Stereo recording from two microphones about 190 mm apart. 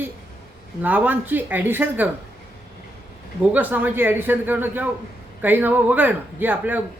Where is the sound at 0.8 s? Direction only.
10° right (ahead or behind).